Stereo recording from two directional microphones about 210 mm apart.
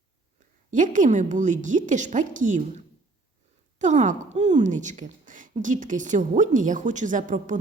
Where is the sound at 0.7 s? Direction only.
40° right (ahead or behind).